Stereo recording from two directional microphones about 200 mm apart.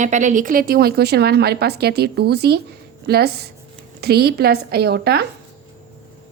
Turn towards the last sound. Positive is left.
turn(degrees=-55)  # may be behind; listen again after turning